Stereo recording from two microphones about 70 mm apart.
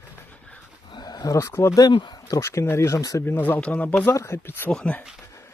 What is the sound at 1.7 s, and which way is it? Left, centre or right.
Speech, left.